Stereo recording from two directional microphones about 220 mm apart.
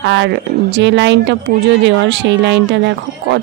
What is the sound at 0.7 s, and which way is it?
Speech, 55° right (ahead or behind).